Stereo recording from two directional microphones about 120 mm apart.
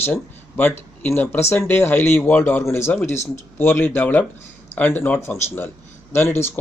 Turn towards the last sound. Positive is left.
turn(degrees=20)  # may be behind; listen again after turning